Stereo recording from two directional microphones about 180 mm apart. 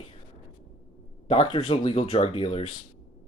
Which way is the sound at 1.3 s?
30° left (ahead or behind).